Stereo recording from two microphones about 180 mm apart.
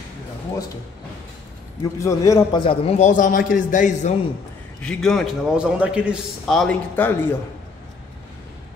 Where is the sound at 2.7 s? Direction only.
35° left (ahead or behind).